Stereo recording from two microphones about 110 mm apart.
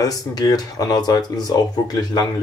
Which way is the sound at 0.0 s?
35° left (ahead or behind).